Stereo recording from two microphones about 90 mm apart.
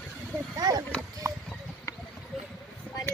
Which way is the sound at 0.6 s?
45° right (ahead or behind).